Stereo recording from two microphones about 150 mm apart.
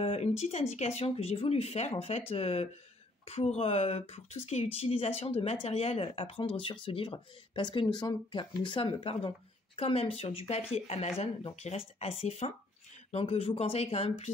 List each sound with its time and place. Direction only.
0.0 s speech: 45° left (ahead or behind)